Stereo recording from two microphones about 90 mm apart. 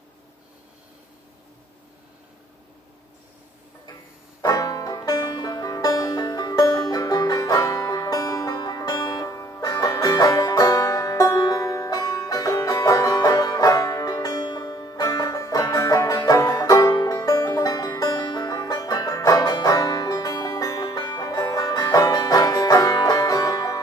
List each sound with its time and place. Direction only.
4.4 s banjo: 40° left (ahead or behind)
16.2 s music: 40° left (ahead or behind)